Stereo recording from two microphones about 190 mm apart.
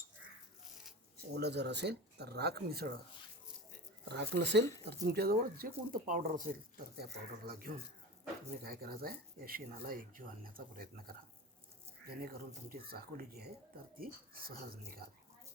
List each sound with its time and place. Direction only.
1.4 s speech: 60° right (ahead or behind)
4.1 s speech: 60° right (ahead or behind)